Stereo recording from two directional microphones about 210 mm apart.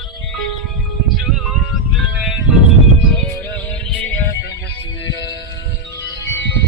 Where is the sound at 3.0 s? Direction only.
5° left (ahead or behind).